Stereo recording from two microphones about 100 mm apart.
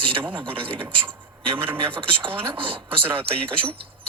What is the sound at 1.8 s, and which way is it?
Speech, 60° right (ahead or behind).